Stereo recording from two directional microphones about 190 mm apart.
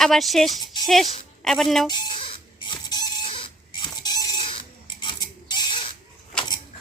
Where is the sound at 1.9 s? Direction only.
25° left (ahead or behind).